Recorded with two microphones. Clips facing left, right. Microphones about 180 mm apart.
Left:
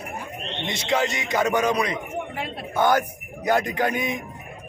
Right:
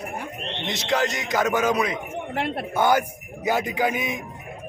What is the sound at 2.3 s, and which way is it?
Speech, 65° right (ahead or behind).